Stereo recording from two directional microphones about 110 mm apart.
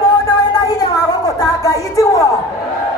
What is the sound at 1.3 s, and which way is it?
Speech, 30° left (ahead or behind).